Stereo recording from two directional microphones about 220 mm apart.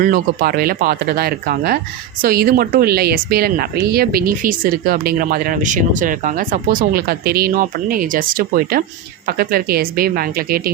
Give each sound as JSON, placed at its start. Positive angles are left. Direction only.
{"t": 0.0, "sound": "a woman's voice", "side_deg": -40}